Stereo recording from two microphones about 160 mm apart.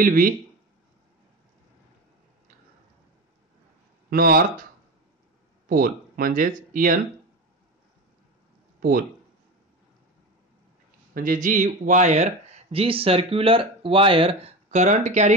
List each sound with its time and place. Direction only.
0.0 s speech: 60° right (ahead or behind)
4.1 s speech: 65° right (ahead or behind)
5.7 s speech: 65° right (ahead or behind)
11.1 s speech: 55° right (ahead or behind)